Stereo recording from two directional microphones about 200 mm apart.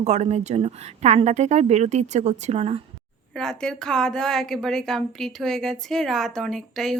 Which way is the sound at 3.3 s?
Centre (ahead or behind).